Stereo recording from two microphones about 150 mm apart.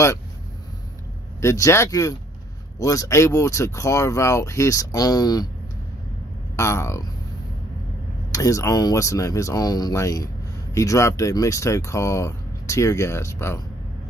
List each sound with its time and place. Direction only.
1.4 s speech: 20° left (ahead or behind)
6.5 s speech: 20° left (ahead or behind)
8.3 s speech: 20° left (ahead or behind)